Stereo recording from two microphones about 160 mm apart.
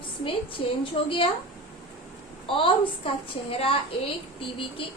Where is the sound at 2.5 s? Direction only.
35° left (ahead or behind).